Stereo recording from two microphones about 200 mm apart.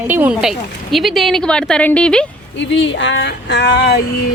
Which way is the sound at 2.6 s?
65° left (ahead or behind).